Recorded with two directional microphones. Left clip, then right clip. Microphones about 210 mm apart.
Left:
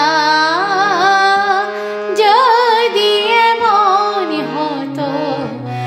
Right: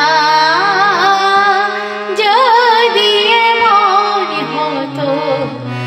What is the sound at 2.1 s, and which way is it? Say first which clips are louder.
Music: even; 5° left (ahead or behind).